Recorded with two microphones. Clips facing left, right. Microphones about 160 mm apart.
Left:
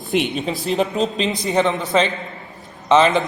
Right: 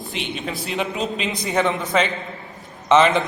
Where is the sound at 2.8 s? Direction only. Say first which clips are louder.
Left 1 dB; 20° left (ahead or behind).